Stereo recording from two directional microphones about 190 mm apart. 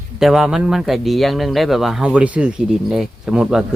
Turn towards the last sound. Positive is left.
turn(degrees=-5)  # may be behind; listen again after turning